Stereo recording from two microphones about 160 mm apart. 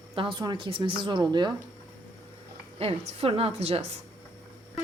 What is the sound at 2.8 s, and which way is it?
A woman's voice, 40° right (ahead or behind).